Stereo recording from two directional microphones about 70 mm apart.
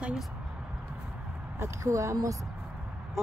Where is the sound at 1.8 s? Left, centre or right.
Right.